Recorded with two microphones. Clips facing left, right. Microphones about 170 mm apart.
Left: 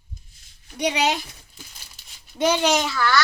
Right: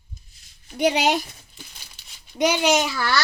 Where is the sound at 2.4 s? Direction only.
10° right (ahead or behind).